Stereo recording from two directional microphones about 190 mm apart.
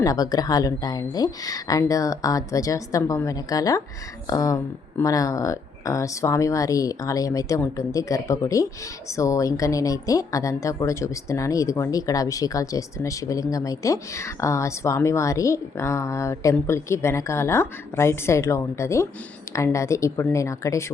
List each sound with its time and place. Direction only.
0.0 s a woman's voice: 20° left (ahead or behind)